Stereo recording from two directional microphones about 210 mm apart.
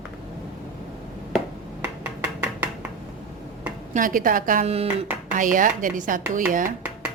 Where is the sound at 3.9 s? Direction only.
40° right (ahead or behind).